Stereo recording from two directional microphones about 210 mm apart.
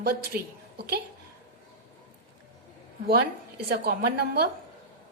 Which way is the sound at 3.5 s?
50° right (ahead or behind).